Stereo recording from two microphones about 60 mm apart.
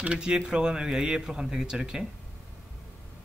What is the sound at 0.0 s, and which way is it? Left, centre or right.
Speech, centre.